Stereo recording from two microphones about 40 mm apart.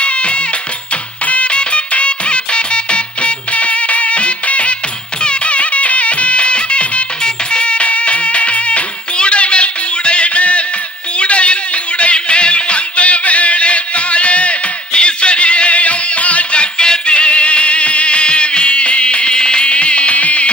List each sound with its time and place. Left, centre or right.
0.0 s music: left
16.7 s music: left